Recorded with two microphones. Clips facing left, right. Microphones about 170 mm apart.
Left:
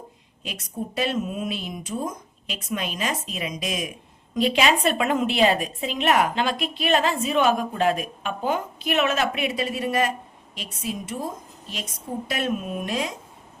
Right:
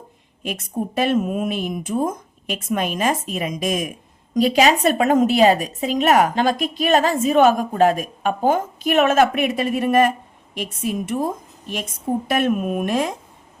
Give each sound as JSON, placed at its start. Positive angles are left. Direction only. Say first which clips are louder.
{"t": 0.4, "sound": "a woman's voice", "louder": "right 7 dB", "side_deg": -50}
{"t": 12.3, "sound": "a woman's voice", "louder": "right 6 dB", "side_deg": -55}